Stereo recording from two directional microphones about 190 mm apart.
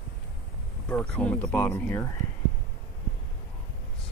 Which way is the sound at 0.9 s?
5° left (ahead or behind).